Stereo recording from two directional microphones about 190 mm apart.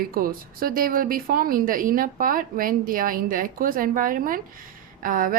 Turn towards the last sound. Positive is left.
turn(degrees=-45)  # may be behind; listen again after turning